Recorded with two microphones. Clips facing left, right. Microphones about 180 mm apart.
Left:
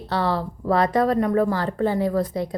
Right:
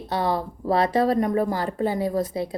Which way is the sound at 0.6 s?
30° right (ahead or behind).